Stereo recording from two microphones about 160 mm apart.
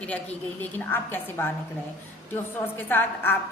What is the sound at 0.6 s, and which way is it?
Speech, 15° left (ahead or behind).